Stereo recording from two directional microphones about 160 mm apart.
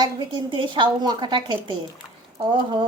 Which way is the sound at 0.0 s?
30° right (ahead or behind).